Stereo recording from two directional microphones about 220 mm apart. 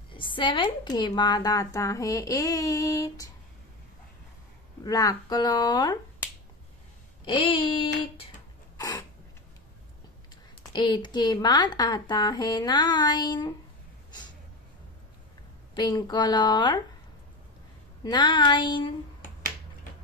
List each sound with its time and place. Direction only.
0.1 s speech: 20° left (ahead or behind)
4.8 s speech: 15° left (ahead or behind)
7.2 s a woman's voice: 25° left (ahead or behind)
8.7 s a sound: 15° left (ahead or behind)
10.7 s a woman's voice: 20° left (ahead or behind)
15.7 s a woman's voice: 20° left (ahead or behind)
18.0 s a woman's voice: 20° left (ahead or behind)